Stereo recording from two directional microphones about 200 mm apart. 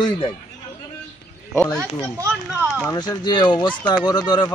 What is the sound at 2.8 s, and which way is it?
Speech, 20° left (ahead or behind).